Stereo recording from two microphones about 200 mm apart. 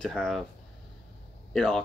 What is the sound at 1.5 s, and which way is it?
Speech, 5° left (ahead or behind).